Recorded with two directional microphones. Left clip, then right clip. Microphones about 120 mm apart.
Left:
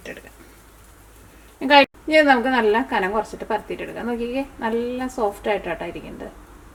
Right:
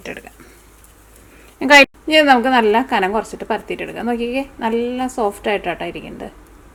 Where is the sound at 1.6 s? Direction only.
40° right (ahead or behind).